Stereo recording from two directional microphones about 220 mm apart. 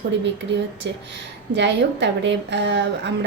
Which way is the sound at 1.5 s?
50° right (ahead or behind).